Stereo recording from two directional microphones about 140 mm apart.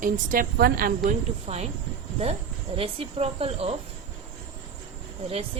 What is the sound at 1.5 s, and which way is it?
Speech, 40° right (ahead or behind).